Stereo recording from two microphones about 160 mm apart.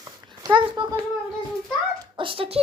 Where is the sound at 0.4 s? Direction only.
30° right (ahead or behind).